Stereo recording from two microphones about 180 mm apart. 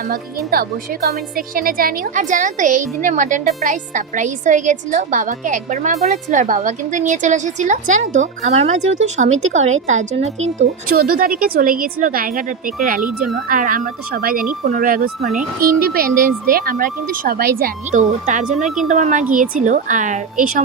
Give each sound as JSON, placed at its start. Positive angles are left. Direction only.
{"t": 0.0, "sound": "speech", "side_deg": -55}
{"t": 10.8, "sound": "speech", "side_deg": -55}